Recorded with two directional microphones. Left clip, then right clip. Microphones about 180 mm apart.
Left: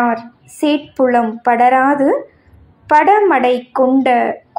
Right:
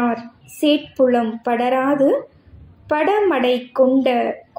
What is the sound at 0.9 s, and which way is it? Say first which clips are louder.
A woman's voice: left 3 dB; 20° left (ahead or behind).